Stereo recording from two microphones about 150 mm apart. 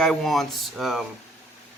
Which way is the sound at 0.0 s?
Centre (ahead or behind).